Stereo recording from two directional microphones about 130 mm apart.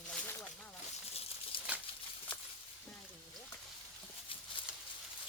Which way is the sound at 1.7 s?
10° right (ahead or behind).